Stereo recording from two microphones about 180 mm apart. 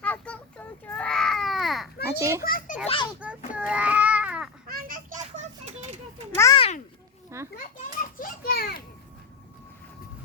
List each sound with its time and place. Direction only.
0.0 s baby cry: 5° left (ahead or behind)
2.0 s a child's voice: 15° right (ahead or behind)
2.4 s a child's voice: 50° left (ahead or behind)
2.8 s a child's voice: 30° left (ahead or behind)
3.2 s a sound: 5° right (ahead or behind)
4.7 s children playing: 55° right (ahead or behind)
6.3 s a sound: 15° left (ahead or behind)
6.6 s a sound: 40° left (ahead or behind)
7.3 s children playing: 15° right (ahead or behind)
7.5 s children playing: 50° left (ahead or behind)